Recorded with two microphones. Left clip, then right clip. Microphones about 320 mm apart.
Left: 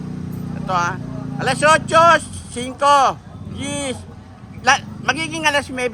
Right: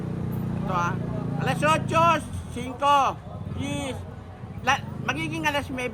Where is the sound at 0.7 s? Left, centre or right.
Left.